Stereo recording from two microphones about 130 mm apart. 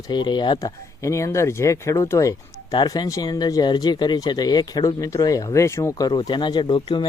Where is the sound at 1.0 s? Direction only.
25° left (ahead or behind).